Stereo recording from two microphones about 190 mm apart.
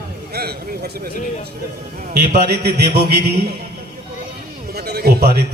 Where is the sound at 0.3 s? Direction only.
55° right (ahead or behind).